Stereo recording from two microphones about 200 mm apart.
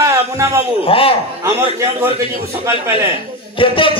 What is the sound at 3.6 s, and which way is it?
Speech, 25° left (ahead or behind).